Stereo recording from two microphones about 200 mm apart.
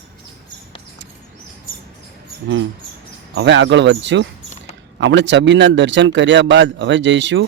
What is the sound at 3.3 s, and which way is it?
A man's voice, 65° right (ahead or behind).